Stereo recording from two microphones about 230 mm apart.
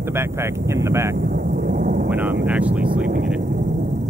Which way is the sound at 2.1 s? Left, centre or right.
Centre.